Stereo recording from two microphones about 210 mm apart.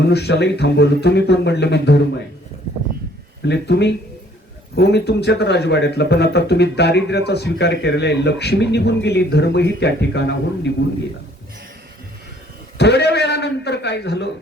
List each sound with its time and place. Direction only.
0.0 s a man's voice: 50° left (ahead or behind)
3.4 s a man's voice: 55° left (ahead or behind)
12.7 s a man's voice: 50° left (ahead or behind)